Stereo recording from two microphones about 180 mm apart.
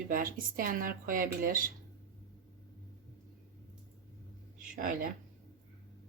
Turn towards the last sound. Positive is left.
turn(degrees=-50)  # may be behind; listen again after turning